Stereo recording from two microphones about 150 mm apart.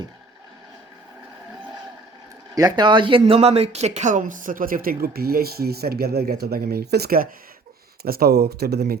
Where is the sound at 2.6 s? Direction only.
30° right (ahead or behind).